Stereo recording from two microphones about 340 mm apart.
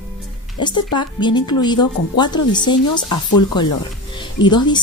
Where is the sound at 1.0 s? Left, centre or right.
Centre.